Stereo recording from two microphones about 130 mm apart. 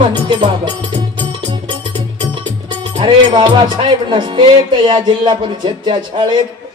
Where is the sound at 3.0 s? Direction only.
40° right (ahead or behind).